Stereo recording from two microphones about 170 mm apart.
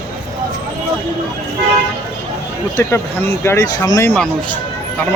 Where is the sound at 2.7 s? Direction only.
15° left (ahead or behind).